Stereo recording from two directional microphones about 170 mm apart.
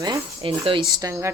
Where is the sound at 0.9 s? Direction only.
20° right (ahead or behind).